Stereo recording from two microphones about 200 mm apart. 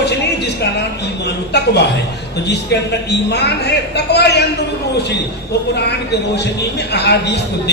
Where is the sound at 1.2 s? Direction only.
55° left (ahead or behind).